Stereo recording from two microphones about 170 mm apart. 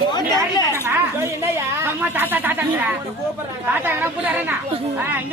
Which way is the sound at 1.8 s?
10° right (ahead or behind).